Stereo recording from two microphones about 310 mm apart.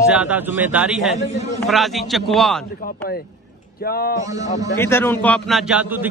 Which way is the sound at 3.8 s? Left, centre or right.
Left.